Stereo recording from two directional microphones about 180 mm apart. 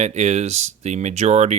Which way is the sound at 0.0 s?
40° right (ahead or behind).